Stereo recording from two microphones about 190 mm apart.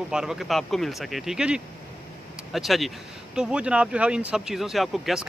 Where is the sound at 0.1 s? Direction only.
5° right (ahead or behind).